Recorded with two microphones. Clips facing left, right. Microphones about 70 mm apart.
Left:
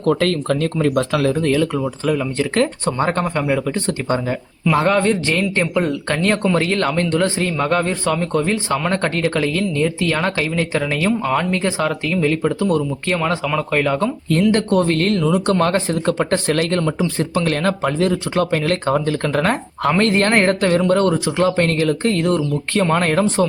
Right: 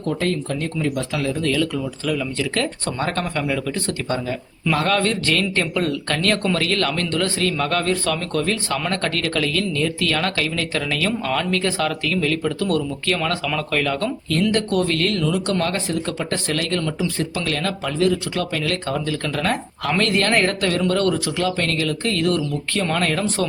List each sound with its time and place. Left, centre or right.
0.0 s speech: left
1.4 s speech: left